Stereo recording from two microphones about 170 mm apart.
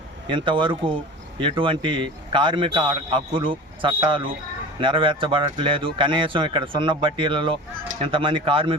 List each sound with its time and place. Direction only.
0.3 s a man's voice: 30° right (ahead or behind)